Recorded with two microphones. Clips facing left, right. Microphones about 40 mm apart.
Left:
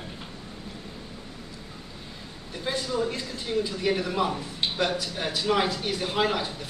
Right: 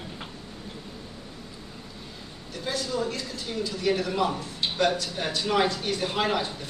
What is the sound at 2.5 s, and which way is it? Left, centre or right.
Speech, left.